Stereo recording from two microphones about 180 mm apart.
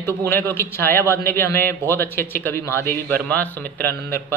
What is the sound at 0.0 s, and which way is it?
A man's voice, 15° left (ahead or behind).